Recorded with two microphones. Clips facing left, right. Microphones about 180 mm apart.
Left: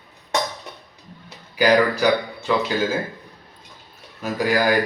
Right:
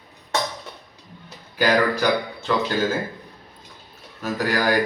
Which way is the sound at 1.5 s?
10° left (ahead or behind).